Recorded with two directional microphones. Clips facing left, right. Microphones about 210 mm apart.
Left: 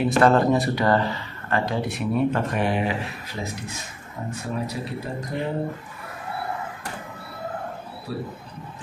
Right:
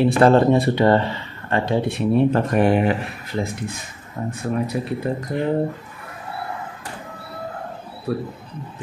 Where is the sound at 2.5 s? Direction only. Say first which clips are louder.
Right 7 dB; 50° right (ahead or behind).